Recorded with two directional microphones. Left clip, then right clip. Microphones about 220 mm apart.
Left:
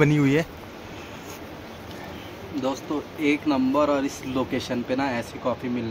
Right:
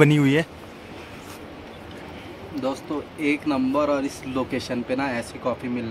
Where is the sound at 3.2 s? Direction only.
10° right (ahead or behind).